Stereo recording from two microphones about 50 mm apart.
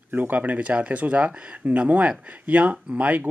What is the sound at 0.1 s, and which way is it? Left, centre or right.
Speech, right.